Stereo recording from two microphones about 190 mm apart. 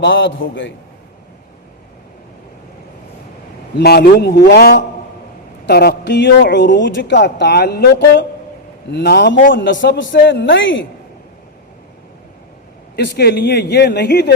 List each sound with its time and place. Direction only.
0.0 s a man's voice: 75° left (ahead or behind)
3.8 s a man's voice: 55° left (ahead or behind)
9.5 s a man's voice: 75° left (ahead or behind)
13.0 s a man's voice: 55° left (ahead or behind)